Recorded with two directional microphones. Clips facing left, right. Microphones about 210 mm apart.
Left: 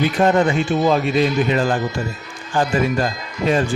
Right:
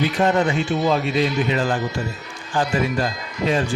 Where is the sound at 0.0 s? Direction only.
50° left (ahead or behind).